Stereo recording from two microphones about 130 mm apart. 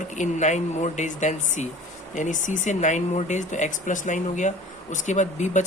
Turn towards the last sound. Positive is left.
turn(degrees=65)  # may be behind; listen again after turning